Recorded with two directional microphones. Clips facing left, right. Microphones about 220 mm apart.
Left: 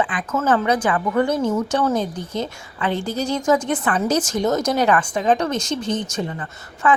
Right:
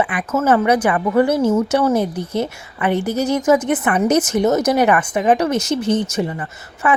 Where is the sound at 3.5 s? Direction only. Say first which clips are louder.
Right 3 dB; 20° right (ahead or behind).